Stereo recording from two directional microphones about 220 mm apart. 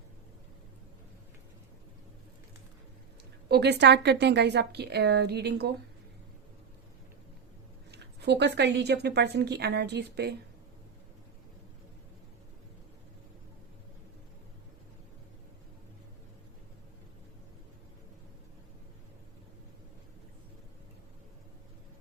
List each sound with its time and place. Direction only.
3.5 s a woman's voice: 50° right (ahead or behind)
7.9 s a woman's voice: 50° right (ahead or behind)